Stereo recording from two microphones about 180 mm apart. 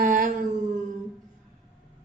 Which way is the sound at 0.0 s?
50° right (ahead or behind).